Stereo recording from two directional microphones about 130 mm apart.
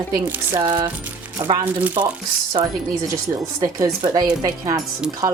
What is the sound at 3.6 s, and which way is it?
Speech, 30° right (ahead or behind).